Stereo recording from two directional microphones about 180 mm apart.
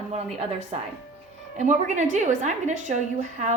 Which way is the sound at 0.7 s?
35° right (ahead or behind).